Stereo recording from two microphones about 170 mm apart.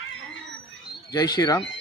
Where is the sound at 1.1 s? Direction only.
25° left (ahead or behind).